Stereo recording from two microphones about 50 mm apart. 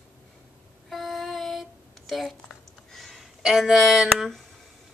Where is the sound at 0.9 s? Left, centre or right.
Centre.